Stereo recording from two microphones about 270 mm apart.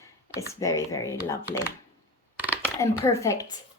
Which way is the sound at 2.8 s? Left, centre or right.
Centre.